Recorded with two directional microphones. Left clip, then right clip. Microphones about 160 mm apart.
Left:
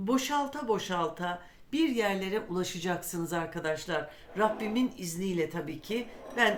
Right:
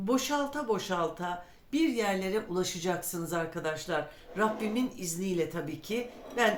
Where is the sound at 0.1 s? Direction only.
40° left (ahead or behind).